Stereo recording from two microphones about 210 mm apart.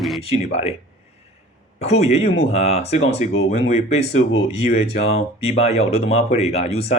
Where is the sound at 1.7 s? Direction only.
30° left (ahead or behind).